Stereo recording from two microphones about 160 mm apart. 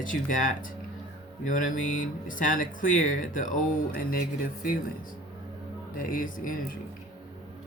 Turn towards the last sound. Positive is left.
turn(degrees=60)  # may be behind; listen again after turning